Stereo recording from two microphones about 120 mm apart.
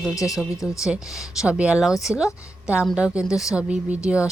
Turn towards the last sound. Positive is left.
turn(degrees=-10)  # may be behind; listen again after turning